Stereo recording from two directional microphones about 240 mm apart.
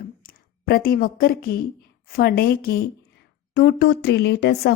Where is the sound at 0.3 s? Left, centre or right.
Left.